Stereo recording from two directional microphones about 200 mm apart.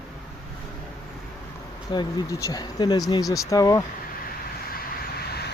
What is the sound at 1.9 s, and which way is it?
Speech, 15° left (ahead or behind).